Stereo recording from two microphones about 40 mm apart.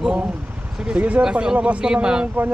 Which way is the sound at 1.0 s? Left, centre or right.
Right.